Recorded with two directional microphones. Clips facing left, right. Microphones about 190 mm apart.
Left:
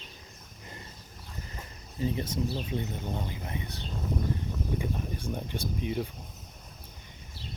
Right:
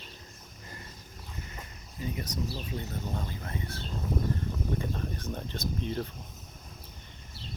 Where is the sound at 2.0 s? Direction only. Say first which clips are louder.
Left 5 dB; 30° left (ahead or behind); by 6.1 s 10° left (ahead or behind).